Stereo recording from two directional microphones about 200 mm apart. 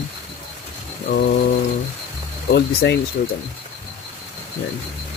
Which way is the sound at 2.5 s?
55° left (ahead or behind).